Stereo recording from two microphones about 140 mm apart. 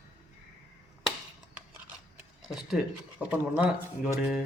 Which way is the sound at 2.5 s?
5° right (ahead or behind).